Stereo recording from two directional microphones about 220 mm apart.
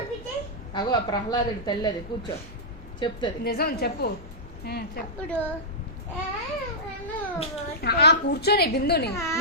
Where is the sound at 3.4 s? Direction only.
45° left (ahead or behind).